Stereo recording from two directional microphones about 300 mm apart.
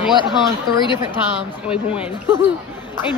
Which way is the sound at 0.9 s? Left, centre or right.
Centre.